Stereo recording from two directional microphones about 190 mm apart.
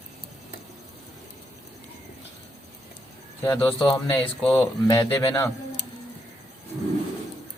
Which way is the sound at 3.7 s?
25° left (ahead or behind).